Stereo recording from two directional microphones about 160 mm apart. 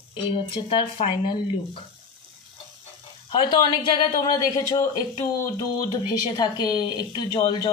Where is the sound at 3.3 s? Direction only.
25° left (ahead or behind).